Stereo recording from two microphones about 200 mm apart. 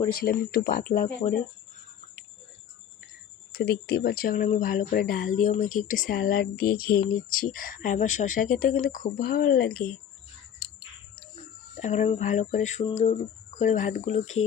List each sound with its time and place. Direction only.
0.1 s speech: 50° left (ahead or behind)
3.5 s speech: 50° left (ahead or behind)
11.8 s speech: 30° left (ahead or behind)